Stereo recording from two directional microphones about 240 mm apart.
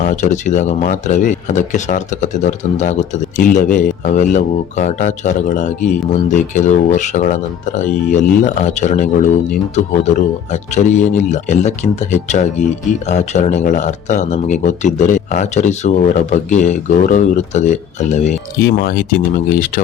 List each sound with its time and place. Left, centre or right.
0.0 s speech: left
18.6 s speech: left